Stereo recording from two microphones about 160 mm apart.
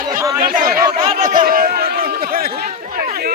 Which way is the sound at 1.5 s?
65° right (ahead or behind).